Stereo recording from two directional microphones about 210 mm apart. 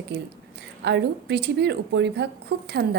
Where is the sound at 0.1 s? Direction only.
55° right (ahead or behind).